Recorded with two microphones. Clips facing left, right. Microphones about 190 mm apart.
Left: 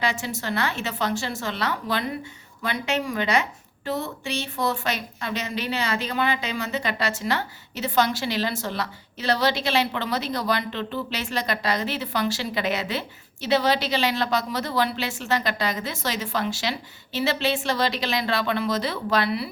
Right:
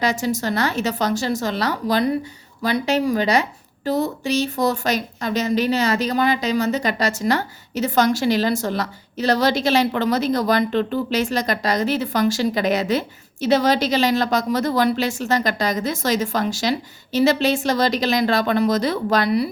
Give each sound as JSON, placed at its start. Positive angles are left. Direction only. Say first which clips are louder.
{"t": 0.0, "sound": "a woman's voice", "louder": "right 6 dB", "side_deg": -40}